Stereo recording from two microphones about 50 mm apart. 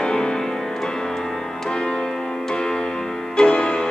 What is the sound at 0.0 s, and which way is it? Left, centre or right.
Music, centre.